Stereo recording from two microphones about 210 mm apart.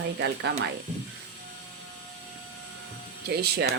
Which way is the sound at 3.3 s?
50° right (ahead or behind).